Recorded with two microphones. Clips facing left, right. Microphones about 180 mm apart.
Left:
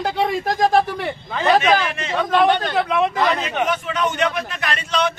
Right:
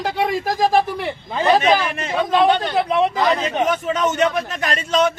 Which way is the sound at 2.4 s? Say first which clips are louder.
Right 1 dB; 15° right (ahead or behind).